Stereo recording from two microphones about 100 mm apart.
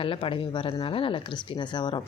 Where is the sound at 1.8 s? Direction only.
50° left (ahead or behind).